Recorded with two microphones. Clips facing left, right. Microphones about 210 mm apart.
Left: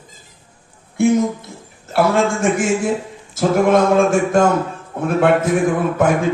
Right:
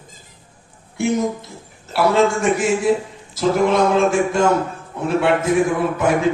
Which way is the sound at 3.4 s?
50° left (ahead or behind).